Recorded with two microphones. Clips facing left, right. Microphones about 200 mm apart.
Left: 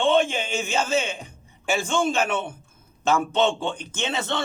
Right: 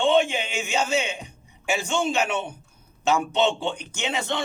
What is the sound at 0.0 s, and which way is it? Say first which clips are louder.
A man's voice: even; 15° right (ahead or behind).